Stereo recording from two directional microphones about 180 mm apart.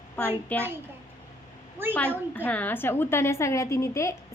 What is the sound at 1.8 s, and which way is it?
Speech, 10° right (ahead or behind).